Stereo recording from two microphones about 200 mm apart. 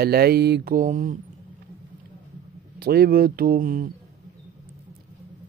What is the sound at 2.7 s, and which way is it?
Mantra, 50° right (ahead or behind).